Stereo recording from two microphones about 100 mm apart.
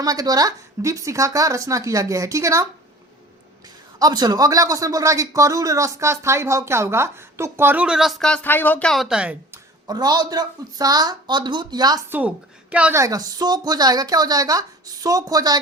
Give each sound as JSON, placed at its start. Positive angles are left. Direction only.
{"t": 0.0, "sound": "speech", "side_deg": -40}
{"t": 3.9, "sound": "speech", "side_deg": -40}
{"t": 7.9, "sound": "speech", "side_deg": -5}
{"t": 8.4, "sound": "speech", "side_deg": 20}
{"t": 8.9, "sound": "speech", "side_deg": -5}
{"t": 9.5, "sound": "a woman's voice", "side_deg": -40}
{"t": 12.0, "sound": "a woman's voice", "side_deg": -20}
{"t": 12.9, "sound": "speech", "side_deg": -30}